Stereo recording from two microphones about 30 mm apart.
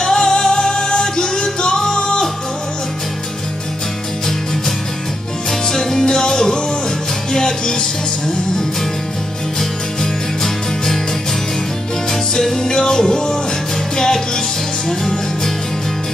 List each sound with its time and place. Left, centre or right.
0.0 s music: left
5.5 s music: centre
12.1 s music: centre